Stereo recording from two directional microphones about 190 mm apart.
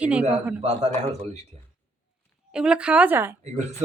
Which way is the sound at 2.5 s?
5° right (ahead or behind).